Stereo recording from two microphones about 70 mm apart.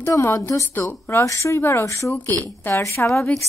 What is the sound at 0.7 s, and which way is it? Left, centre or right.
Speech, left.